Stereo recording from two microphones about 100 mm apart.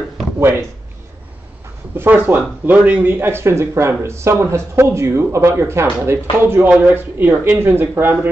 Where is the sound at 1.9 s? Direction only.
20° right (ahead or behind).